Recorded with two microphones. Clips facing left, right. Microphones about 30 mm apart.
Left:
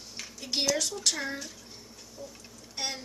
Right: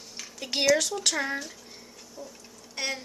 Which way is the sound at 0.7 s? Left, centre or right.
Right.